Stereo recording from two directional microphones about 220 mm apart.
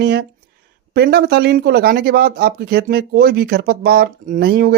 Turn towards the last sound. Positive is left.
turn(degrees=-40)  # may be behind; listen again after turning